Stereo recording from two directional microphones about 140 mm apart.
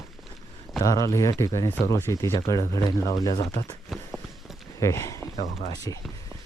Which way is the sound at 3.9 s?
Centre (ahead or behind).